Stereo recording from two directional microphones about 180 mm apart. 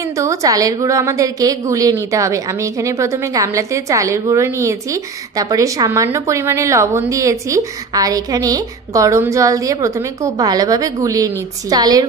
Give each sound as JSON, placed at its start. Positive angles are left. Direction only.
{"t": 0.2, "sound": "a woman's voice", "side_deg": -20}